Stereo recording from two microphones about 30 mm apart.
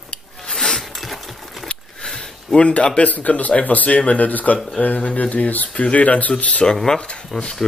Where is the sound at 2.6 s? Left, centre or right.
Left.